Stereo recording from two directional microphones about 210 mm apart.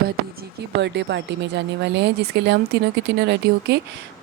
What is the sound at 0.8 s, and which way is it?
A woman's voice, 55° right (ahead or behind).